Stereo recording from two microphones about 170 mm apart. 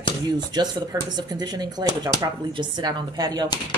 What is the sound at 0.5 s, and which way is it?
Speech, 25° right (ahead or behind).